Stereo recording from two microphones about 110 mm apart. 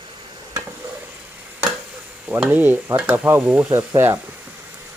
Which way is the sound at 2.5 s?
15° right (ahead or behind).